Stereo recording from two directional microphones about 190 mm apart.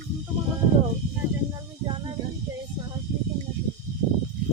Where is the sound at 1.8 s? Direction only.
25° right (ahead or behind).